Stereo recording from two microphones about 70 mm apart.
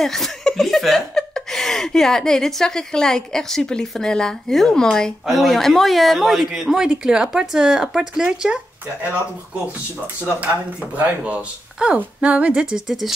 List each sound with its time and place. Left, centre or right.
0.0 s speech: centre
10.4 s speech: right; by 13.1 s centre